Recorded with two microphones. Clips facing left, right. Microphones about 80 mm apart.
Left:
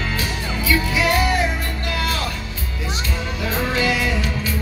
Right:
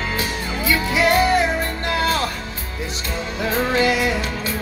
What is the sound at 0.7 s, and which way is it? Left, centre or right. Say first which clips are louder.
Music: right 2 dB; right.